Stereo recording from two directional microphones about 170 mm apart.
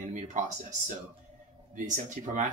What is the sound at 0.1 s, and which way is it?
Speech, 45° right (ahead or behind).